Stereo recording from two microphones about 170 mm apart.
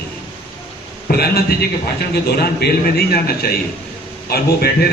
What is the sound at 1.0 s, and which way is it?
A man's voice, 65° left (ahead or behind).